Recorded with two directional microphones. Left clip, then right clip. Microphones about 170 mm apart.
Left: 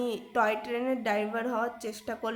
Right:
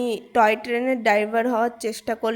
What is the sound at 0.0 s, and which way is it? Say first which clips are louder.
A woman's voice: right 9 dB; 35° right (ahead or behind).